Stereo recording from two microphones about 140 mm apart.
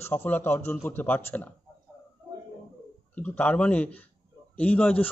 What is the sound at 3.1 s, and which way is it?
A man's voice, 10° left (ahead or behind).